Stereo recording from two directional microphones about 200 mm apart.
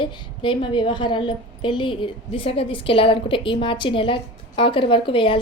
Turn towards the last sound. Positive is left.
turn(degrees=25)  # may be behind; listen again after turning